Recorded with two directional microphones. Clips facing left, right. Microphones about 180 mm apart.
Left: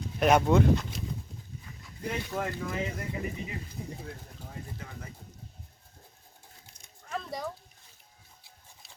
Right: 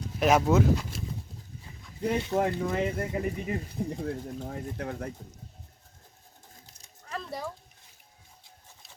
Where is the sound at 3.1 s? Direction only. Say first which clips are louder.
Right 6 dB; 50° right (ahead or behind).